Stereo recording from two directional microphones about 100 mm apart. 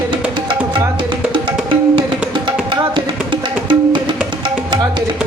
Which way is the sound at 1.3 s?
55° right (ahead or behind).